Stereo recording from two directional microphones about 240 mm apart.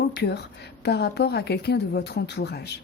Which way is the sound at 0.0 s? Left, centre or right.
Left.